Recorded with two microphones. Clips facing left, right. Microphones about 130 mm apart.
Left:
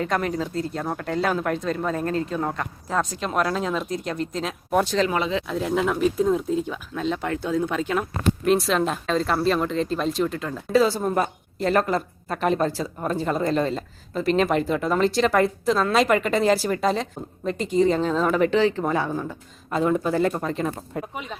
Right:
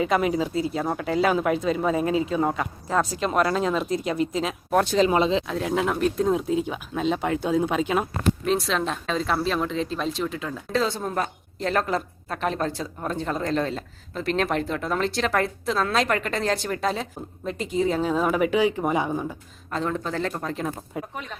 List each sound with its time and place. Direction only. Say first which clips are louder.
0.0 s speech: right 2 dB; 5° right (ahead or behind)
4.9 s speech: right 3 dB; 20° right (ahead or behind)
5.5 s speech: left 1 dB; centre (ahead or behind)
6.7 s speech: right 1 dB; 20° right (ahead or behind)
8.4 s speech: left 7 dB; centre (ahead or behind); by 19.4 s 15° right (ahead or behind)
19.7 s speech: left 5 dB; 10° left (ahead or behind)